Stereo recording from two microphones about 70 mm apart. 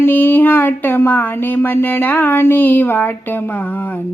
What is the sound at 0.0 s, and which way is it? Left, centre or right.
Speech, left.